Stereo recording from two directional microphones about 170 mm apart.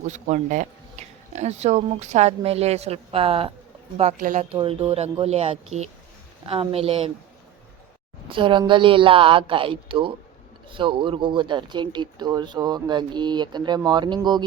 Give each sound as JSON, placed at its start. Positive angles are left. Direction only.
{"t": 0.1, "sound": "speech", "side_deg": -45}
{"t": 4.2, "sound": "speech", "side_deg": -50}
{"t": 4.5, "sound": "speech", "side_deg": -30}
{"t": 8.3, "sound": "speech", "side_deg": -30}